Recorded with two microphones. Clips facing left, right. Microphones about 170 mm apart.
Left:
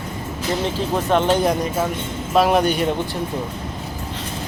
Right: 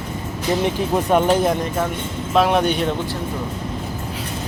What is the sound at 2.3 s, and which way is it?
Speech, centre (ahead or behind).